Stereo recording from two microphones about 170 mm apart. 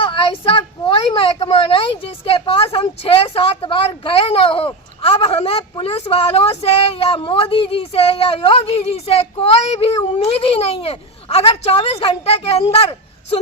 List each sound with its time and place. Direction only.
0.0 s speech: 30° left (ahead or behind)